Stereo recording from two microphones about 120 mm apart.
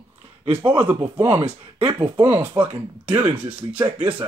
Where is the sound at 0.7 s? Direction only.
45° right (ahead or behind).